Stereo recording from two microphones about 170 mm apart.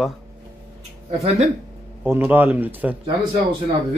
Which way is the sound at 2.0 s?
10° right (ahead or behind).